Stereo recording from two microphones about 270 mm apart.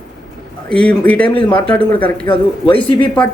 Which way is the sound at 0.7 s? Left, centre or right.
Centre.